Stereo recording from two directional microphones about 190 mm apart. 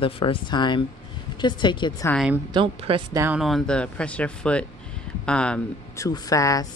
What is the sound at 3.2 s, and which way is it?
Speech, centre (ahead or behind).